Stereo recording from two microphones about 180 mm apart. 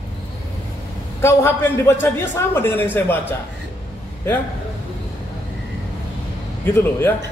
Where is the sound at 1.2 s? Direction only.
15° left (ahead or behind).